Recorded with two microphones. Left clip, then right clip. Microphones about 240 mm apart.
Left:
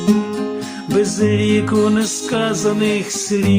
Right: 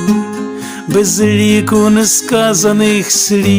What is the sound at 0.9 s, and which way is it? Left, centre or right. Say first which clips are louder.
Music: right 5 dB; right.